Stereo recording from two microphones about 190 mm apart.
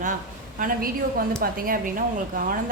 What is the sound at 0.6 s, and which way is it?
A woman's voice, 50° right (ahead or behind).